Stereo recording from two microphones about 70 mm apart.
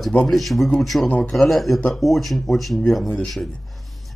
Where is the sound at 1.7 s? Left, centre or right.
Centre.